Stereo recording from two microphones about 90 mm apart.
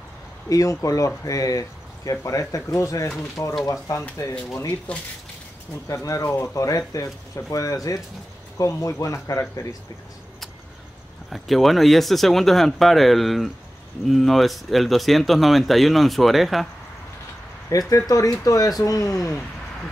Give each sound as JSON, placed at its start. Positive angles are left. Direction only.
{"t": 0.5, "sound": "speech", "side_deg": 40}
{"t": 4.9, "sound": "speech", "side_deg": 15}
{"t": 5.9, "sound": "speech", "side_deg": 35}
{"t": 11.2, "sound": "speech", "side_deg": 0}
{"t": 17.6, "sound": "speech", "side_deg": 40}